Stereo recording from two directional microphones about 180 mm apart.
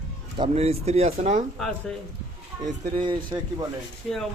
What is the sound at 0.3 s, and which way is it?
Speech, 30° right (ahead or behind).